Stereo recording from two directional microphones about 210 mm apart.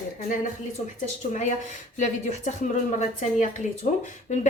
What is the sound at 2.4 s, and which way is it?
Speech, 35° left (ahead or behind).